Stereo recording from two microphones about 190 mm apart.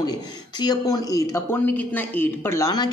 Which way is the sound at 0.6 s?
20° left (ahead or behind).